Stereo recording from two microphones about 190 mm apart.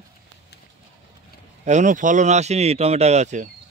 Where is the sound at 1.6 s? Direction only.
40° right (ahead or behind).